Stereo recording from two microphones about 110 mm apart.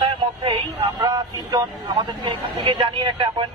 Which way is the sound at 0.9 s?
35° right (ahead or behind).